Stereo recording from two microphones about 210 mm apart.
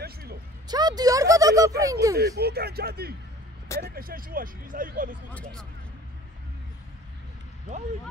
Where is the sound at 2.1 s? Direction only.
50° right (ahead or behind).